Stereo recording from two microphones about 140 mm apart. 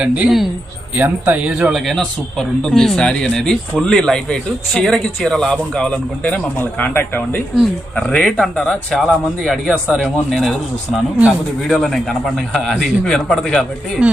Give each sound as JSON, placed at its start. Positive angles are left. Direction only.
{"t": 0.0, "sound": "a man's voice", "side_deg": -10}
{"t": 11.7, "sound": "a man's voice", "side_deg": 0}
{"t": 14.0, "sound": "speech", "side_deg": -10}